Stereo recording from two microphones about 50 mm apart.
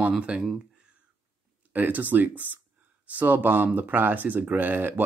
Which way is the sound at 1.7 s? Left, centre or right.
Right.